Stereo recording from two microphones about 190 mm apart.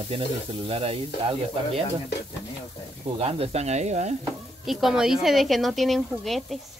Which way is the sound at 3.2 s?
35° right (ahead or behind).